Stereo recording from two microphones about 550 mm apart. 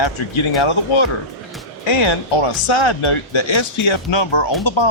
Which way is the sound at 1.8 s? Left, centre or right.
Left.